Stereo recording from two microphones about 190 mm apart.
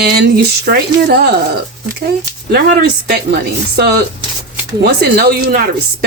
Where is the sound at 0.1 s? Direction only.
55° right (ahead or behind).